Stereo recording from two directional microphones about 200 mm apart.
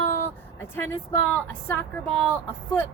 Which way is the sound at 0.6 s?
10° left (ahead or behind).